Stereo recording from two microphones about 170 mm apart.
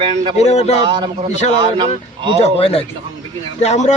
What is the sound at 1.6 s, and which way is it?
Speech, 30° right (ahead or behind).